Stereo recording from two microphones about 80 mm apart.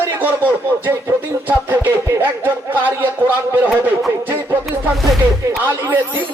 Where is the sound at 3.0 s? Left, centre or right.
Right.